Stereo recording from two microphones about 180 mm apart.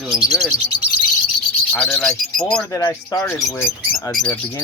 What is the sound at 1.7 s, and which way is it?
Speech, 5° left (ahead or behind).